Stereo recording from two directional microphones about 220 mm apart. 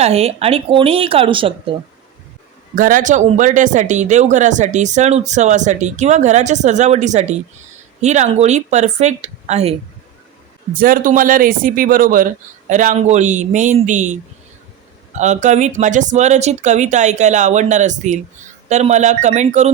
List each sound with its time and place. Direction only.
0.0 s speech: 25° right (ahead or behind)
2.7 s speech: 35° right (ahead or behind)
10.8 s speech: 40° right (ahead or behind)
15.2 s speech: 35° right (ahead or behind)